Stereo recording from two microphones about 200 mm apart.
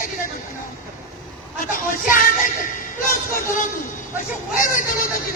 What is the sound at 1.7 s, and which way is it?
Music, 45° left (ahead or behind).